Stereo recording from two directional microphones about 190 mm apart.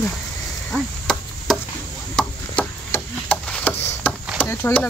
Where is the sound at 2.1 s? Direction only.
5° left (ahead or behind).